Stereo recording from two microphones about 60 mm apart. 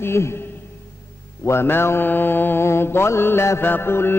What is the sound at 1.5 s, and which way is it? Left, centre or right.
Mantra, left.